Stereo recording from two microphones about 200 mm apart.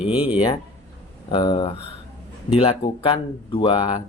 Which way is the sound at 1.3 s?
25° left (ahead or behind).